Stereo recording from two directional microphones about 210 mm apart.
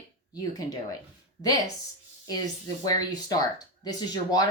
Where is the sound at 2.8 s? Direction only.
20° left (ahead or behind).